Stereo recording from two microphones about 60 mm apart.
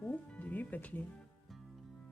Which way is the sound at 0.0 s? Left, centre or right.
Left.